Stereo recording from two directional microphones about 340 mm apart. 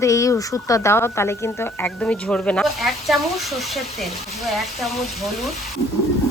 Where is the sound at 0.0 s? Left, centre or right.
Centre.